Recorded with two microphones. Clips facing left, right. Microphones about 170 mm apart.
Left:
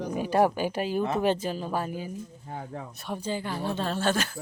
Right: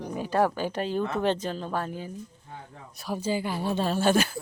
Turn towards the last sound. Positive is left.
turn(degrees=-10)  # may be behind; listen again after turning